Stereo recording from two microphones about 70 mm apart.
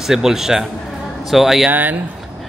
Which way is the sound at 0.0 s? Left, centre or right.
Centre.